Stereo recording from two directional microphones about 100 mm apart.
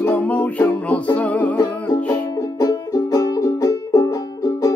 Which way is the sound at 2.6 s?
40° left (ahead or behind).